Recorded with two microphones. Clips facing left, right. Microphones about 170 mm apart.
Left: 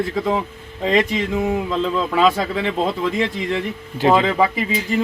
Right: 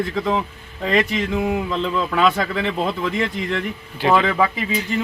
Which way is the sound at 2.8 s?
20° left (ahead or behind).